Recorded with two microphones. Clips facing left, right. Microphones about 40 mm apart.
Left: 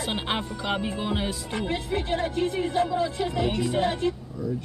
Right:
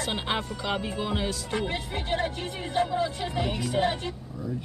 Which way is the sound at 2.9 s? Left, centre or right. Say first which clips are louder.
Left 2 dB; centre.